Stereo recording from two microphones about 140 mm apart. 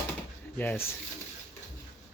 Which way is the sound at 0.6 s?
15° left (ahead or behind).